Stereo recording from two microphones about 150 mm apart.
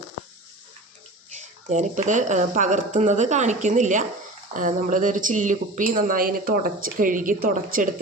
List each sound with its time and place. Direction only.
1.3 s speech: 55° right (ahead or behind)